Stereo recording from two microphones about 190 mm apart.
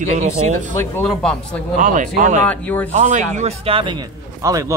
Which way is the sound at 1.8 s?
45° right (ahead or behind).